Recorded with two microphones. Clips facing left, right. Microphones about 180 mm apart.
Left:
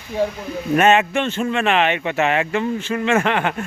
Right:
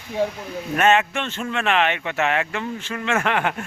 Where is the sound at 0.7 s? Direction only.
10° left (ahead or behind).